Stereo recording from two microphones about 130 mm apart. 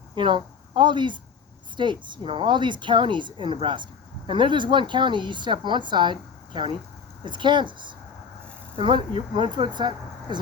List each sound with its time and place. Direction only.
0.2 s speech: 40° right (ahead or behind)